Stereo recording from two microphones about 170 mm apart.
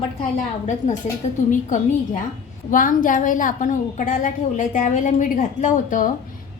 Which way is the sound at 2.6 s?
50° left (ahead or behind).